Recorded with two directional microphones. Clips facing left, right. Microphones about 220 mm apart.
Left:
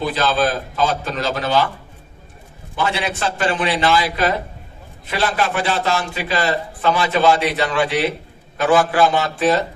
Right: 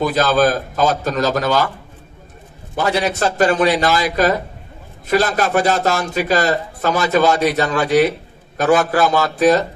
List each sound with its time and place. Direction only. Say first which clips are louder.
0.0 s a man's voice: right 4 dB; 45° right (ahead or behind)
2.7 s a man's voice: right 4 dB; 45° right (ahead or behind)